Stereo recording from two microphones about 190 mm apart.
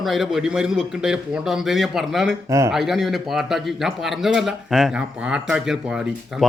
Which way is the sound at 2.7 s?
Centre (ahead or behind).